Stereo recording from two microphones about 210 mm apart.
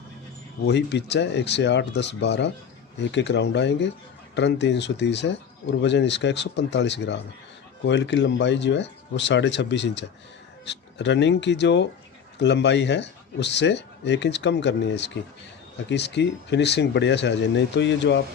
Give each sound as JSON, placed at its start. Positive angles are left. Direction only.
{"t": 0.6, "sound": "speech", "side_deg": 55}